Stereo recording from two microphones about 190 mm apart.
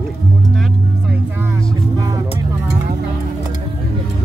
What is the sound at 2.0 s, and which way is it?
Music, 20° right (ahead or behind).